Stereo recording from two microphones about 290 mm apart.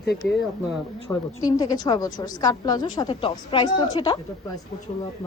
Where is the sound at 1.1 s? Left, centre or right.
Centre.